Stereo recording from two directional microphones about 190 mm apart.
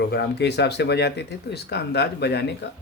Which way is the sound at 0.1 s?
60° left (ahead or behind).